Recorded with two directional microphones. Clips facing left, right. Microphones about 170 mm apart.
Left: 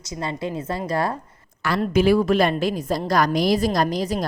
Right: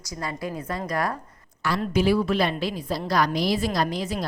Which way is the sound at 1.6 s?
55° left (ahead or behind).